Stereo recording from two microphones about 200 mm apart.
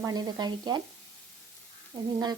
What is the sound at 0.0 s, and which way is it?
Speech, 20° right (ahead or behind).